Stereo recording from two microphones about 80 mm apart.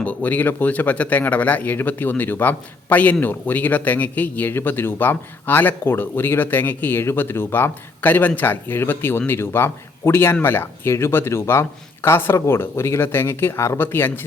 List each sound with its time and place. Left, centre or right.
0.0 s speech: centre